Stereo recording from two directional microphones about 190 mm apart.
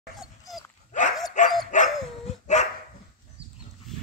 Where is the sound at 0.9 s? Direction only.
40° left (ahead or behind).